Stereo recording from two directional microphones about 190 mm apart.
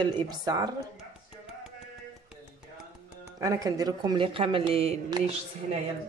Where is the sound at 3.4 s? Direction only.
20° right (ahead or behind).